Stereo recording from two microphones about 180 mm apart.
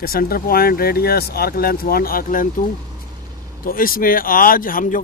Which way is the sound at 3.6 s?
55° left (ahead or behind).